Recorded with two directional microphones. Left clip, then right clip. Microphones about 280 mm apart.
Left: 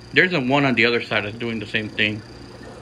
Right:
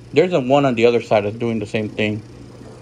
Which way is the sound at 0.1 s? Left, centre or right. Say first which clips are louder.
Right 3 dB; centre.